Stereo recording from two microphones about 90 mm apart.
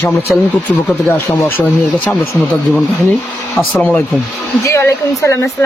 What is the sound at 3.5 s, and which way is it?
Speech, 20° left (ahead or behind).